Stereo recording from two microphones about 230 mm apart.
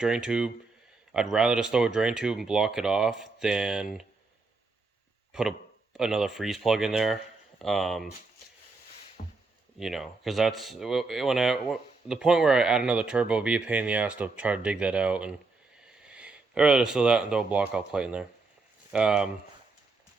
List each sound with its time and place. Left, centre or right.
0.0 s speech: centre
5.3 s speech: centre
9.2 s a sound: left
9.7 s speech: centre